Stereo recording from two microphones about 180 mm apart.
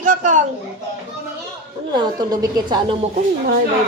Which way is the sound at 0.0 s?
45° right (ahead or behind).